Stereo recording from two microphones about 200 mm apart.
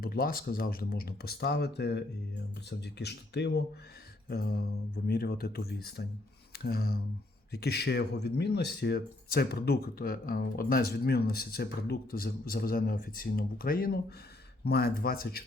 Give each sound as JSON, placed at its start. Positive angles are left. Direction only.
{"t": 0.0, "sound": "speech", "side_deg": 45}